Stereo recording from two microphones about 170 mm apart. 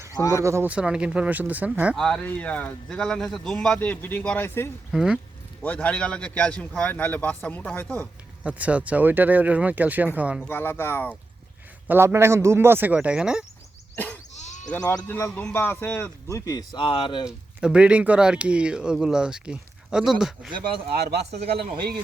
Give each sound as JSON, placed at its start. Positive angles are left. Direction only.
{"t": 0.2, "sound": "speech", "side_deg": 20}
{"t": 0.4, "sound": "speech", "side_deg": -15}
{"t": 2.0, "sound": "speech", "side_deg": 5}
{"t": 4.9, "sound": "speech", "side_deg": -5}
{"t": 5.6, "sound": "speech", "side_deg": 10}
{"t": 8.4, "sound": "speech", "side_deg": -10}
{"t": 10.4, "sound": "speech", "side_deg": 10}
{"t": 11.9, "sound": "speech", "side_deg": -15}
{"t": 13.9, "sound": "goat", "side_deg": 10}
{"t": 14.3, "sound": "bleat", "side_deg": 45}
{"t": 14.7, "sound": "speech", "side_deg": 10}
{"t": 17.2, "sound": "speech", "side_deg": -5}
{"t": 20.5, "sound": "speech", "side_deg": -30}
{"t": 20.9, "sound": "speech", "side_deg": -70}